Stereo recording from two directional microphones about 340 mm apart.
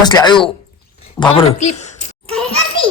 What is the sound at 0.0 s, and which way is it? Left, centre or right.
Speech, centre.